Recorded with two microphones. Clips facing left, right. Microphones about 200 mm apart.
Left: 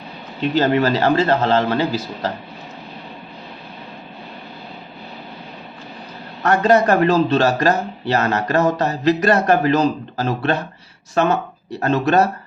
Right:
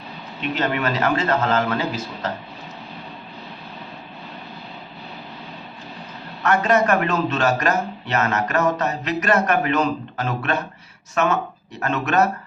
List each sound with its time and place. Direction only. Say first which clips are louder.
0.5 s speech: left 6 dB; 35° left (ahead or behind)
6.4 s speech: left 4 dB; 35° left (ahead or behind)